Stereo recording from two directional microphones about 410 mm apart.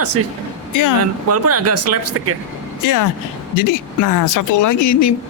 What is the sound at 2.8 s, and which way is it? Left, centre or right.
Speech, left.